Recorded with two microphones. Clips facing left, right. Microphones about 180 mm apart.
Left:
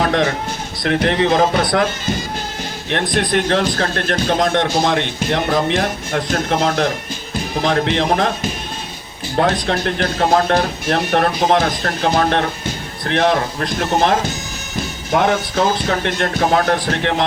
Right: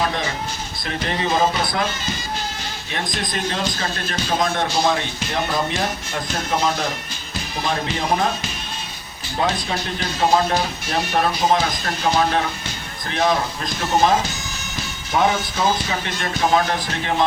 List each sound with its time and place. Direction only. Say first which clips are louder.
0.0 s a sound: left 7 dB; 65° left (ahead or behind)
0.8 s speech: left 9 dB; 65° left (ahead or behind)
2.9 s speech: left 9 dB; 70° left (ahead or behind)